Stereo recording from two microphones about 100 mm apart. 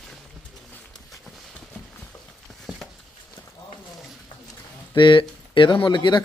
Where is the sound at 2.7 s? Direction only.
10° right (ahead or behind).